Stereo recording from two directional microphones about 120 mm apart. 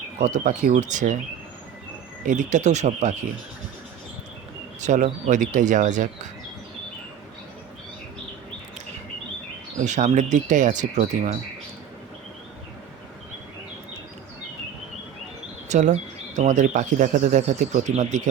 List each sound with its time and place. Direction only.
0.3 s speech: 90° right
2.2 s speech: 90° right
4.8 s speech: 90° right
9.8 s speech: 85° right
15.7 s speech: 80° right